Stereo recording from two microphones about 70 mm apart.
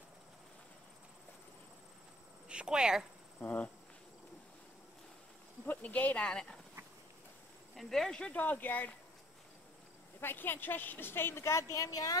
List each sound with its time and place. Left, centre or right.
2.4 s speech: centre
3.3 s speech: left
5.7 s speech: left
7.7 s speech: centre
8.2 s speech: left
10.2 s a woman's voice: left